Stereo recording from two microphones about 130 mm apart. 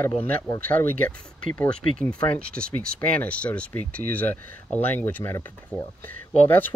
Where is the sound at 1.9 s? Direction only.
10° left (ahead or behind).